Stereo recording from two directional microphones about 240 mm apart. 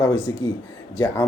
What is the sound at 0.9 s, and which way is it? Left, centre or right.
Speech, centre.